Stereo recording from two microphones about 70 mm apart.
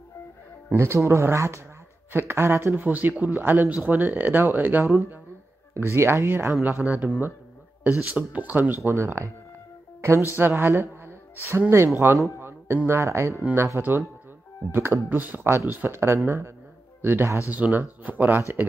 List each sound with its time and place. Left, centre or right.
0.7 s speech: right
10.3 s speech: right
10.7 s music: right
11.7 s speech: right